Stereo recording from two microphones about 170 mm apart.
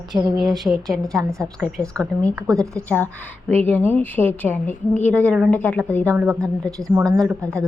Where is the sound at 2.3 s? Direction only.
20° right (ahead or behind).